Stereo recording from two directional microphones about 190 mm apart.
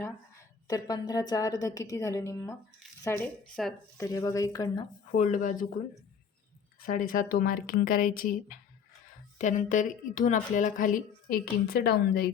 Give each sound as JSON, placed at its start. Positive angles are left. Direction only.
{"t": 0.7, "sound": "a woman's voice", "side_deg": 20}
{"t": 3.5, "sound": "speech", "side_deg": 0}
{"t": 3.9, "sound": "speech", "side_deg": 15}
{"t": 5.1, "sound": "speech", "side_deg": 40}
{"t": 6.7, "sound": "a woman's voice", "side_deg": 50}